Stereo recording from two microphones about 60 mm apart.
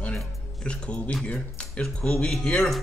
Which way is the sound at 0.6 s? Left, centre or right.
Centre.